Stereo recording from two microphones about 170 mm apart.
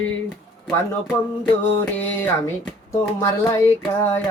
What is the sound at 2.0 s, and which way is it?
Music, 10° left (ahead or behind).